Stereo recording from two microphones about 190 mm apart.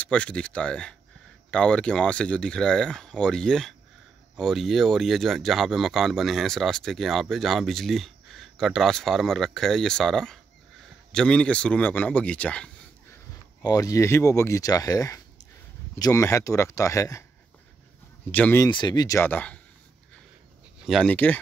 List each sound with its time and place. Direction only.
0.0 s speech: 5° left (ahead or behind)
13.6 s speech: 20° left (ahead or behind)
18.3 s speech: 10° left (ahead or behind)
18.7 s speech: 25° left (ahead or behind); by 19.6 s 10° left (ahead or behind)
20.8 s speech: centre (ahead or behind)